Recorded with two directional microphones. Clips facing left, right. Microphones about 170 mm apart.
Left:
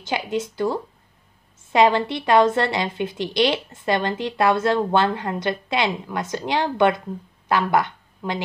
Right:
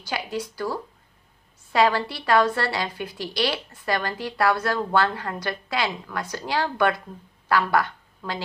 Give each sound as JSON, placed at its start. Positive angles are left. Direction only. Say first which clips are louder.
{"t": 0.0, "sound": "a woman's voice", "louder": "left 5 dB", "side_deg": 20}